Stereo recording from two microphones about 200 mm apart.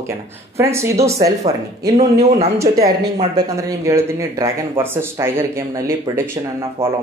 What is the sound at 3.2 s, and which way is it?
Speech, 15° right (ahead or behind).